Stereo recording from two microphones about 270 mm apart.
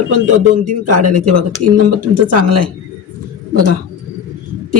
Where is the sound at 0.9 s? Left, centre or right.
Right.